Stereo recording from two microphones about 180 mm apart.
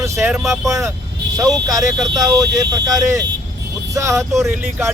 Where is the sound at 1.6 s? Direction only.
20° right (ahead or behind).